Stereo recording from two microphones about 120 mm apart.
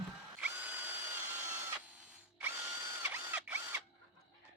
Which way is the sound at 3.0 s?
15° right (ahead or behind).